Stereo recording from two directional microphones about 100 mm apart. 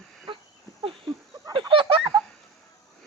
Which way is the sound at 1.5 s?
60° right (ahead or behind).